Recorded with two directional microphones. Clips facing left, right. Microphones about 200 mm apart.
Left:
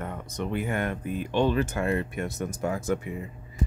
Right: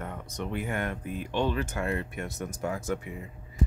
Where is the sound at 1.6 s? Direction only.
30° left (ahead or behind).